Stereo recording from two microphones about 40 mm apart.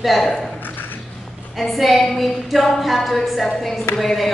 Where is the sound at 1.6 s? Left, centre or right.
Centre.